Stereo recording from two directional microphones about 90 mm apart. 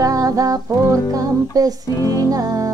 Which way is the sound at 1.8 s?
40° left (ahead or behind).